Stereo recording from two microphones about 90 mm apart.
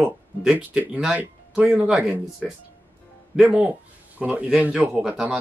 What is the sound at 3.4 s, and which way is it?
Speech, 15° right (ahead or behind).